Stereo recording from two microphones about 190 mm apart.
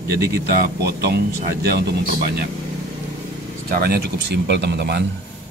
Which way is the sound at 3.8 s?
55° right (ahead or behind).